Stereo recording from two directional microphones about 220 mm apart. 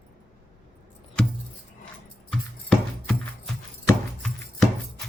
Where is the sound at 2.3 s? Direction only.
Centre (ahead or behind).